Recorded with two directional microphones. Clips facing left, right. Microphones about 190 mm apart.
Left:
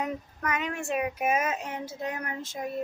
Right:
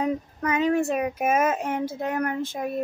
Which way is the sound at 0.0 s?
30° right (ahead or behind).